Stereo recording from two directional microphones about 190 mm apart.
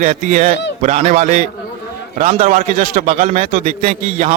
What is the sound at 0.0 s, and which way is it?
A man's voice, 40° right (ahead or behind).